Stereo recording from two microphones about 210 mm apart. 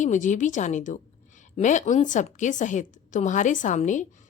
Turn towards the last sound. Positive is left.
turn(degrees=35)  # may be behind; listen again after turning